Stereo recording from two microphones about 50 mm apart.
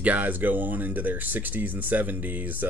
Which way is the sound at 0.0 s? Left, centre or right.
Right.